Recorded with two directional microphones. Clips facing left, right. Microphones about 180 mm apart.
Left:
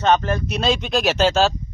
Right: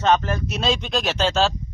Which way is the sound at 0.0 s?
Centre (ahead or behind).